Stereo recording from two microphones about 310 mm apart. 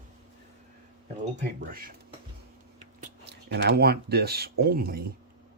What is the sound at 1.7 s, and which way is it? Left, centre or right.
Speech, right.